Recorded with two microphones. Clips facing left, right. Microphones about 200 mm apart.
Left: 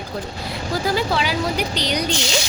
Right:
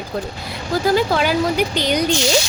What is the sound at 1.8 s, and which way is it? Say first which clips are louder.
Speech: right 4 dB; 50° right (ahead or behind).